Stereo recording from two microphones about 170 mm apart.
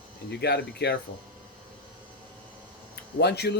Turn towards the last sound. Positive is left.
turn(degrees=75)  # may be behind; listen again after turning